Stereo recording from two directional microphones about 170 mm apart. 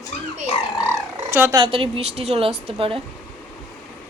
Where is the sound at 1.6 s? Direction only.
30° right (ahead or behind).